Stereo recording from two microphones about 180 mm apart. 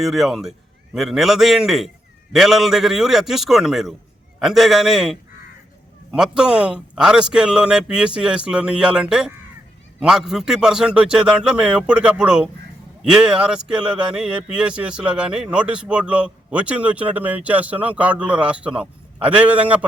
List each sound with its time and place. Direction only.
0.0 s speech: centre (ahead or behind)